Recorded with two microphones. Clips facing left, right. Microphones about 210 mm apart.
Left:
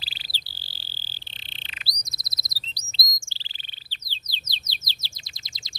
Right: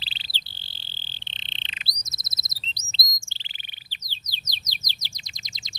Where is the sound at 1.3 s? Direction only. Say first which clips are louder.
Right 3 dB; 20° right (ahead or behind).